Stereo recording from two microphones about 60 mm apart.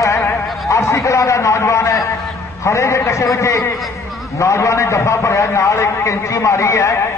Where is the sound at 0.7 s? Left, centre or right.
Left.